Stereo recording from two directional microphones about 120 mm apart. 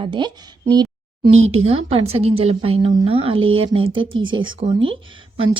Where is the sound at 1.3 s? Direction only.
65° right (ahead or behind); by 4.5 s 45° right (ahead or behind).